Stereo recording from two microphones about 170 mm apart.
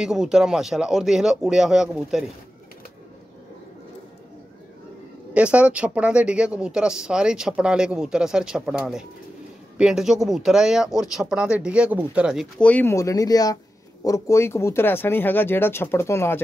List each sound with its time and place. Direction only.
0.0 s speech: 5° right (ahead or behind)
5.3 s speech: 5° right (ahead or behind)
12.5 s speech: 10° left (ahead or behind)